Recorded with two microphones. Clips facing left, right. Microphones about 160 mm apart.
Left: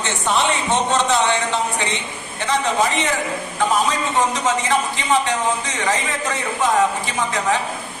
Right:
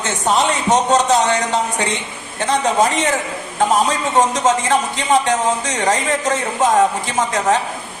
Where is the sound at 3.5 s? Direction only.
45° right (ahead or behind).